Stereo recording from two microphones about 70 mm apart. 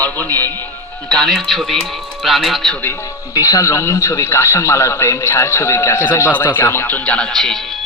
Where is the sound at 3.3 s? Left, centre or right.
Left.